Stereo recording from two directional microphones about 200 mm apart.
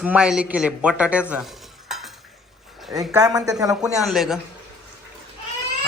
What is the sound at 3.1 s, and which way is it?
Speech, 20° right (ahead or behind).